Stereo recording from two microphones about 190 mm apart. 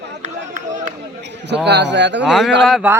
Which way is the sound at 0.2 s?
40° right (ahead or behind).